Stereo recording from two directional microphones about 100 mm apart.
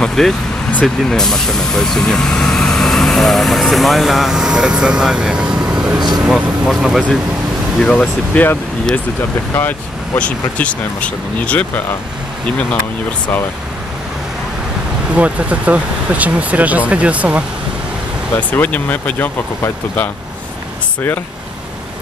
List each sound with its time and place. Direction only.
0.0 s speech: 5° left (ahead or behind); by 5.9 s 10° right (ahead or behind)
5.9 s a sound: 45° right (ahead or behind)
6.2 s speech: 5° right (ahead or behind)
7.8 s speech: 15° left (ahead or behind)
15.1 s speech: 15° right (ahead or behind)
18.5 s speech: 15° left (ahead or behind)